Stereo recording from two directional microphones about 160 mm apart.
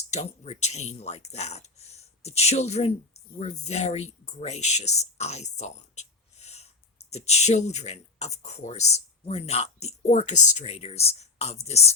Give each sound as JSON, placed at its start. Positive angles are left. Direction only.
{"t": 0.1, "sound": "speech", "side_deg": 45}